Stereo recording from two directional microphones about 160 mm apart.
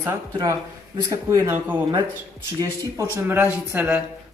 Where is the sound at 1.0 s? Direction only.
20° right (ahead or behind).